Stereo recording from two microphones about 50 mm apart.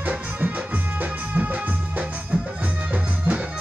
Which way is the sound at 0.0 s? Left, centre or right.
Right.